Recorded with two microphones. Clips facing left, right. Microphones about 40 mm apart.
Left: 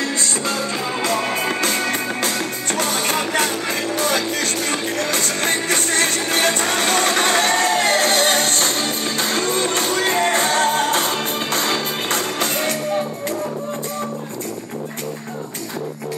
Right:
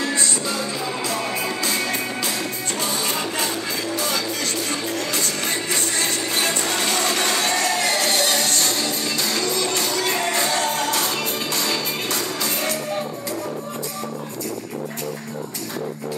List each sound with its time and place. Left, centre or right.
0.0 s music: left